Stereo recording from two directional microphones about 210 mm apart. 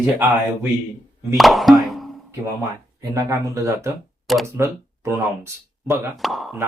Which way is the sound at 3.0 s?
15° right (ahead or behind).